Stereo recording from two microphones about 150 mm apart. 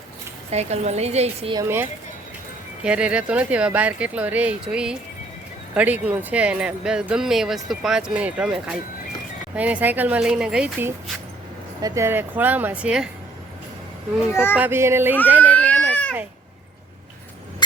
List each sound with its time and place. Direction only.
0.5 s a woman's voice: 45° right (ahead or behind)
1.5 s speech: 15° right (ahead or behind)
11.8 s speech: 20° right (ahead or behind); by 13.1 s 5° right (ahead or behind)
14.5 s speech: 15° right (ahead or behind)
15.5 s baby cry: 10° left (ahead or behind)